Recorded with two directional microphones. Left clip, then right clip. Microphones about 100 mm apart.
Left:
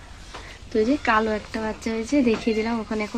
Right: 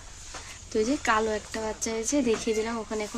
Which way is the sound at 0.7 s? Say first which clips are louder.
Left 4 dB; 20° left (ahead or behind).